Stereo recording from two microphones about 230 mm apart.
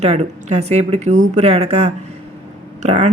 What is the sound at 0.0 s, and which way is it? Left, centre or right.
Speech, right.